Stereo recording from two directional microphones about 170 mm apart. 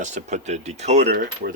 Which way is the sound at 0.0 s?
45° right (ahead or behind).